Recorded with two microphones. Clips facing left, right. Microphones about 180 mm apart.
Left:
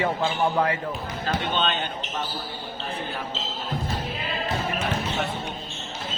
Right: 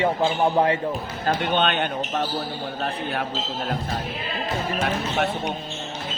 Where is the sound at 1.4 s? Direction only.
60° right (ahead or behind).